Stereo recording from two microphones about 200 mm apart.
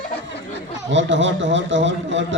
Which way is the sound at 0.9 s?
65° right (ahead or behind).